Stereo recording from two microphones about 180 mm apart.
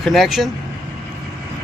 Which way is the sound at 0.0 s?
Centre (ahead or behind).